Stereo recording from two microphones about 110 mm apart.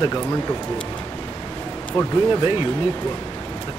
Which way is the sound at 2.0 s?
50° left (ahead or behind).